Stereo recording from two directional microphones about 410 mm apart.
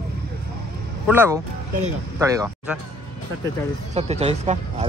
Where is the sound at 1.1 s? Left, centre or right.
Centre.